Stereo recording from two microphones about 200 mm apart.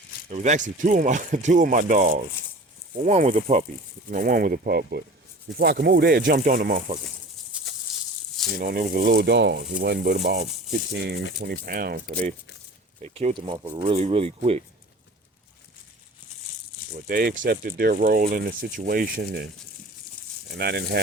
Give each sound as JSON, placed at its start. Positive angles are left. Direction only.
{"t": 0.3, "sound": "speech", "side_deg": -35}
{"t": 4.1, "sound": "speech", "side_deg": -45}
{"t": 7.5, "sound": "a sound", "side_deg": -5}
{"t": 8.5, "sound": "speech", "side_deg": -45}
{"t": 13.3, "sound": "speech", "side_deg": -25}
{"t": 17.1, "sound": "speech", "side_deg": -45}
{"t": 20.6, "sound": "speech", "side_deg": -55}